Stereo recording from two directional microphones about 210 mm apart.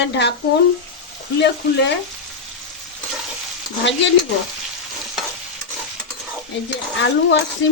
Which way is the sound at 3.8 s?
60° left (ahead or behind).